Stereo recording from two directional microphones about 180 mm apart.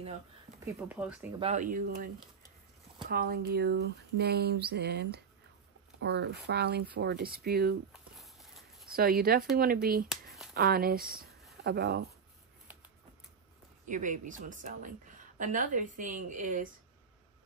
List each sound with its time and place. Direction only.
0.8 s speech: 10° right (ahead or behind)
1.4 s a woman's voice: 45° right (ahead or behind)
3.1 s speech: 55° right (ahead or behind)
8.2 s clip-clop: centre (ahead or behind)
8.9 s speech: 55° right (ahead or behind)
10.0 s a sound: centre (ahead or behind)
10.5 s speech: 60° right (ahead or behind)
13.8 s a woman's voice: 45° right (ahead or behind)